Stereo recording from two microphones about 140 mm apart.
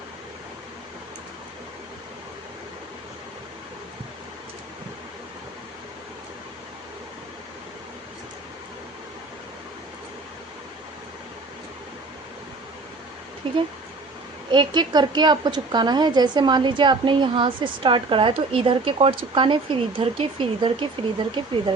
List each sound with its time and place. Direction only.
13.4 s a woman's voice: 40° right (ahead or behind)